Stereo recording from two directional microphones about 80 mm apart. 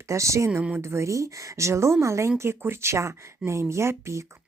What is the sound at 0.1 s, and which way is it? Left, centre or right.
Speech, right.